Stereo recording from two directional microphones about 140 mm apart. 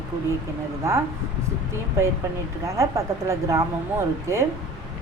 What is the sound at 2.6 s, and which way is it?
A woman's voice, 20° right (ahead or behind).